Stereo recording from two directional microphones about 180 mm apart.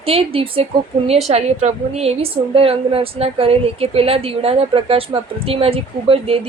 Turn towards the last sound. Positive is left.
turn(degrees=-30)  # may be behind; listen again after turning